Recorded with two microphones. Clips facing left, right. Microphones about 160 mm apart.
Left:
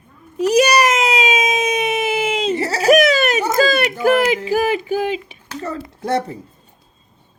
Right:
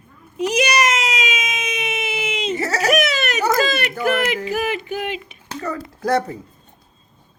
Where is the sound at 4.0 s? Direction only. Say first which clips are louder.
Left 4 dB; 35° left (ahead or behind).